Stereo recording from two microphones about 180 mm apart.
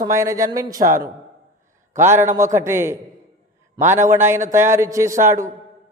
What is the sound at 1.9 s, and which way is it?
Speech, 15° right (ahead or behind).